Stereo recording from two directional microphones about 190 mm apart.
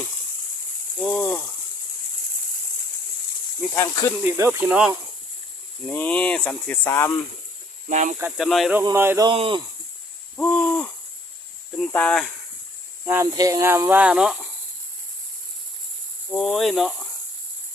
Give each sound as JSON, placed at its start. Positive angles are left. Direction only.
{"t": 0.9, "sound": "speech", "side_deg": 5}
{"t": 3.8, "sound": "speech", "side_deg": 20}
{"t": 4.2, "sound": "cricket", "side_deg": -15}
{"t": 5.9, "sound": "speech", "side_deg": 10}
{"t": 7.9, "sound": "speech", "side_deg": -40}
{"t": 8.2, "sound": "speech", "side_deg": 0}
{"t": 8.8, "sound": "cricket", "side_deg": -15}
{"t": 9.3, "sound": "speech", "side_deg": -25}
{"t": 10.3, "sound": "hoot", "side_deg": 5}
{"t": 11.8, "sound": "speech", "side_deg": 5}
{"t": 13.1, "sound": "cricket", "side_deg": -15}
{"t": 16.3, "sound": "speech", "side_deg": 5}